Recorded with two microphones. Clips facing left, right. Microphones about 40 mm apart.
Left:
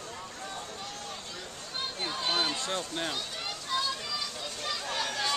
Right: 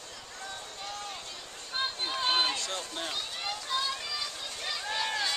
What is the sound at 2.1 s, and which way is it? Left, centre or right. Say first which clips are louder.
Run: right 2 dB; right.